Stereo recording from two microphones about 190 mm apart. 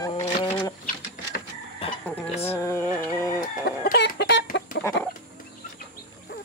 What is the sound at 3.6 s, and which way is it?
Chicken, 60° left (ahead or behind).